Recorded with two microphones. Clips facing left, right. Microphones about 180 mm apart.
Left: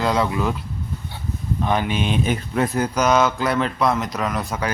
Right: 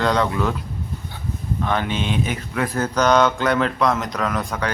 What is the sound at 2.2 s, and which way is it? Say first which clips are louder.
Speech: left 3 dB; 25° left (ahead or behind).